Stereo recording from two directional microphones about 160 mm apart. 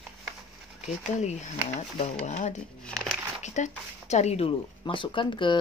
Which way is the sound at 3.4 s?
50° left (ahead or behind).